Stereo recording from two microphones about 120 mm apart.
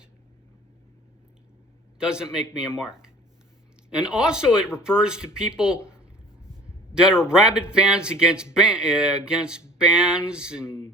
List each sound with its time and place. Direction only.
2.0 s speech: 5° right (ahead or behind)
5.7 s speech: 25° left (ahead or behind)
7.2 s speech: 5° right (ahead or behind)